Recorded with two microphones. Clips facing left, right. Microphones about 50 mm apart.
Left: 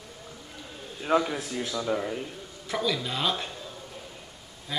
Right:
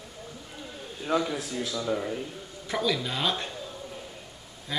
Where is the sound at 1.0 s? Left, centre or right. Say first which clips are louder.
Left 2 dB; centre.